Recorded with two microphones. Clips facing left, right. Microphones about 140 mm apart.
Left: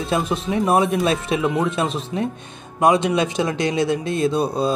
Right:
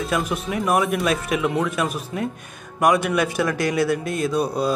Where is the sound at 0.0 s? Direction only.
25° left (ahead or behind).